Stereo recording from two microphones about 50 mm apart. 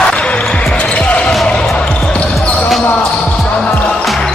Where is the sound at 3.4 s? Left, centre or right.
Centre.